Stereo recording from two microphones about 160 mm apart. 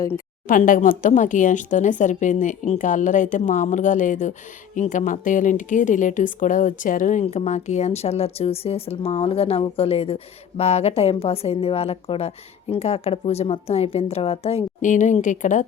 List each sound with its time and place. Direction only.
0.4 s a woman's voice: 60° left (ahead or behind)